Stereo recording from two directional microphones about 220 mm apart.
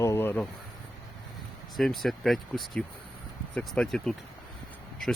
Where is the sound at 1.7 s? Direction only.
Centre (ahead or behind).